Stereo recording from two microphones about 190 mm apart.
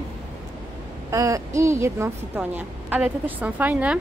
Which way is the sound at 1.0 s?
15° right (ahead or behind).